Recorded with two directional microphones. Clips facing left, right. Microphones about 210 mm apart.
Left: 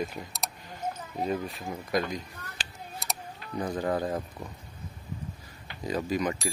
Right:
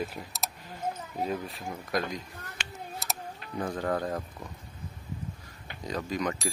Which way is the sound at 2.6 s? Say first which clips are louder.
Right 2 dB; 35° left (ahead or behind).